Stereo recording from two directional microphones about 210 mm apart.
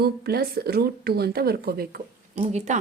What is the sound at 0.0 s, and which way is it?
A woman's voice, 50° right (ahead or behind).